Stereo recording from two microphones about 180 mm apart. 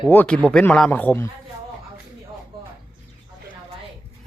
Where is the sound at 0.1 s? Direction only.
10° left (ahead or behind).